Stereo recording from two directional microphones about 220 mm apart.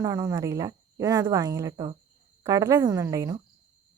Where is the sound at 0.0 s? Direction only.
15° right (ahead or behind).